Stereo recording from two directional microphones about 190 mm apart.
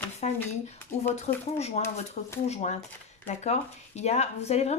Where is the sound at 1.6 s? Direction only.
35° left (ahead or behind).